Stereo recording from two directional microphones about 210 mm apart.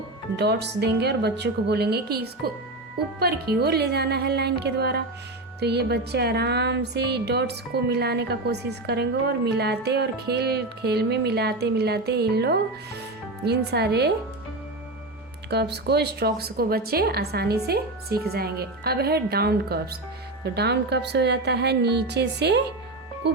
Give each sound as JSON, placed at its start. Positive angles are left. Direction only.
{"t": 0.3, "sound": "music", "side_deg": -55}
{"t": 15.4, "sound": "music", "side_deg": -50}
{"t": 23.2, "sound": "speech", "side_deg": -55}